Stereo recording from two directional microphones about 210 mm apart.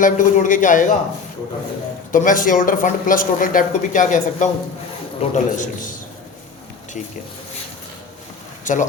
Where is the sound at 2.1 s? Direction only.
40° left (ahead or behind).